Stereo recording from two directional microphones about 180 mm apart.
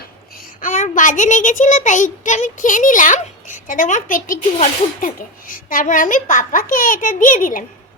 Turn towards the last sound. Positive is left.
turn(degrees=50)  # may be behind; listen again after turning